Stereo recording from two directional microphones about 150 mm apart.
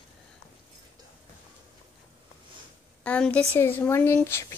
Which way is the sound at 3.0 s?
10° left (ahead or behind).